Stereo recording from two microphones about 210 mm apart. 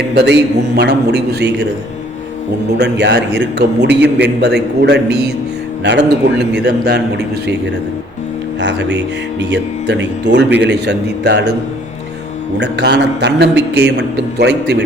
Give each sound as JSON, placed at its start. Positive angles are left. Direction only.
{"t": 0.8, "sound": "a man's voice", "side_deg": -50}
{"t": 2.6, "sound": "a man's voice", "side_deg": -50}
{"t": 8.6, "sound": "a man's voice", "side_deg": -55}
{"t": 12.5, "sound": "a man's voice", "side_deg": -55}